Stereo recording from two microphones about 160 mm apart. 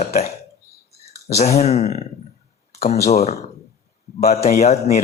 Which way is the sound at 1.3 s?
45° left (ahead or behind).